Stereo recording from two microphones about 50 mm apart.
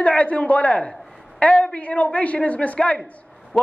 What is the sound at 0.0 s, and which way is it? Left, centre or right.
Speech, left.